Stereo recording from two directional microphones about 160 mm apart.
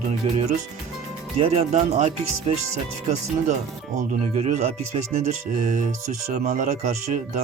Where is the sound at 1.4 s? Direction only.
40° right (ahead or behind).